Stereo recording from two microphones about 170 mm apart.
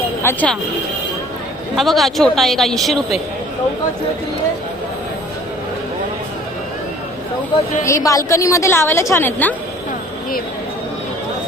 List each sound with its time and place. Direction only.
0.2 s speech: 10° left (ahead or behind)
1.7 s a woman's voice: centre (ahead or behind)
7.9 s a woman's voice: 20° left (ahead or behind)